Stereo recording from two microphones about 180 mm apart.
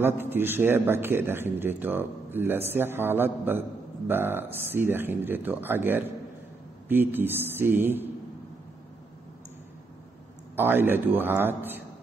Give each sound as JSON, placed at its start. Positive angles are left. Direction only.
{"t": 0.0, "sound": "speech", "side_deg": -10}
{"t": 10.5, "sound": "speech", "side_deg": -10}